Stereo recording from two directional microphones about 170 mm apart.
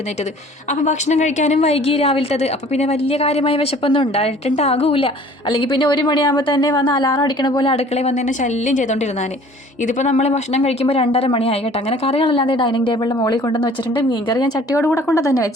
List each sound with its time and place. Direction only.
0.7 s a woman's voice: 45° left (ahead or behind); by 15.4 s 20° left (ahead or behind)